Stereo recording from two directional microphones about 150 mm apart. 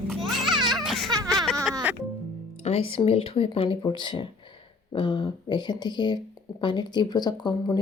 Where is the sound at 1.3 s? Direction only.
5° left (ahead or behind).